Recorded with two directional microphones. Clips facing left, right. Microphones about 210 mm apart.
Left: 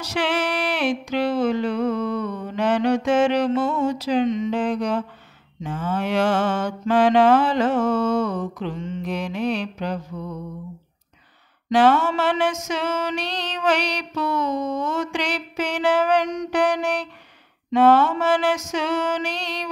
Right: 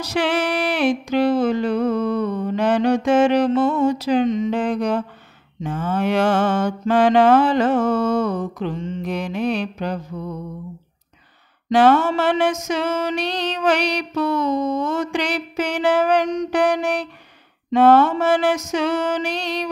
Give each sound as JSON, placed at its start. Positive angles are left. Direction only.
{"t": 0.1, "sound": "music", "side_deg": -40}
{"t": 3.6, "sound": "a sound", "side_deg": -55}
{"t": 5.6, "sound": "mantra", "side_deg": -50}
{"t": 11.7, "sound": "mantra", "side_deg": -50}
{"t": 13.8, "sound": "a sound", "side_deg": -55}
{"t": 14.3, "sound": "mantra", "side_deg": -55}
{"t": 15.9, "sound": "music", "side_deg": -40}
{"t": 17.6, "sound": "mantra", "side_deg": -40}